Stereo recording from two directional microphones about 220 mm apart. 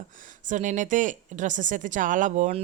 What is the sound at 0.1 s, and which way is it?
A woman's voice, 35° right (ahead or behind).